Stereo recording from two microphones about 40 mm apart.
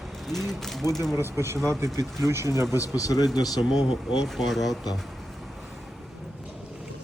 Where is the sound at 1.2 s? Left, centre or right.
Right.